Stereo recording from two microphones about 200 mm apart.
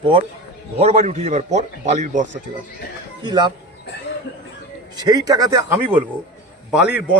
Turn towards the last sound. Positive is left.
turn(degrees=-5)  # may be behind; listen again after turning